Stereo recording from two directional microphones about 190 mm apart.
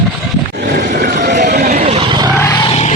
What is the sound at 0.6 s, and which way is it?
Vehicle, 60° right (ahead or behind).